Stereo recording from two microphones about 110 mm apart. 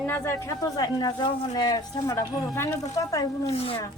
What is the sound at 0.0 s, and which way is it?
Speech, 20° left (ahead or behind).